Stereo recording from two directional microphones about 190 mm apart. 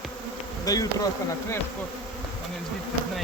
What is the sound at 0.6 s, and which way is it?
Insect, 20° left (ahead or behind).